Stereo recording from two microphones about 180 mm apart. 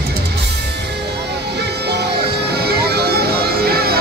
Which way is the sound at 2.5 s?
60° right (ahead or behind).